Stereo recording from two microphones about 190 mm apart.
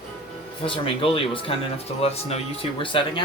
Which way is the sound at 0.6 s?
30° left (ahead or behind).